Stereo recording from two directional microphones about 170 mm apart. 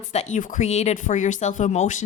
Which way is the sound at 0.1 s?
40° left (ahead or behind).